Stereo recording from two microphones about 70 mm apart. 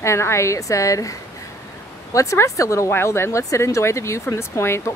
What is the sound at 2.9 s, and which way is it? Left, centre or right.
Speech, left.